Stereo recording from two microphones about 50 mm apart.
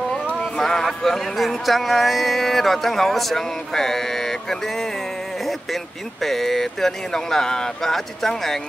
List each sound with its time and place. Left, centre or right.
0.6 s speech: centre